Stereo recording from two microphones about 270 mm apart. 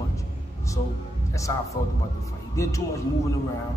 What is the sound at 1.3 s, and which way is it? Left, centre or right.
Speech, centre.